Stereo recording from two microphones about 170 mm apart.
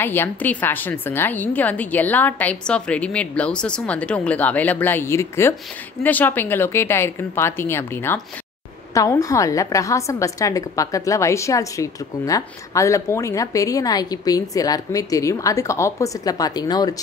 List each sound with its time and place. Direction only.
0.0 s a woman's voice: 15° left (ahead or behind)